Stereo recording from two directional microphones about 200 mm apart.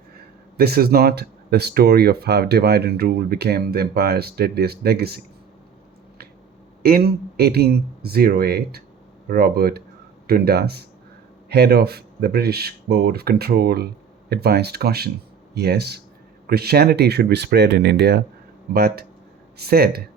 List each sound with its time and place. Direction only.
0.5 s speech: 50° right (ahead or behind)
6.8 s speech: 50° right (ahead or behind)